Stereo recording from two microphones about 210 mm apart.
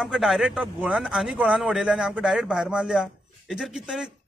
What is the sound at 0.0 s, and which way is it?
Speech, centre (ahead or behind).